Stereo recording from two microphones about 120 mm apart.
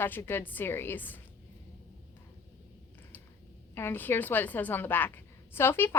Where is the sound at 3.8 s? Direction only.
15° left (ahead or behind).